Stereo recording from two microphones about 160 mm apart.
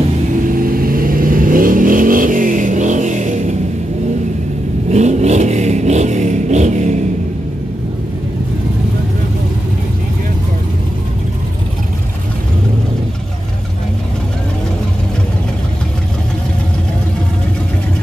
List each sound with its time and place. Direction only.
0.5 s vehicle: 60° right (ahead or behind)
4.9 s vehicle: 45° right (ahead or behind)